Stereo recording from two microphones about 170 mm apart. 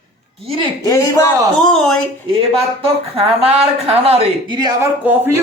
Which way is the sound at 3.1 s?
35° right (ahead or behind).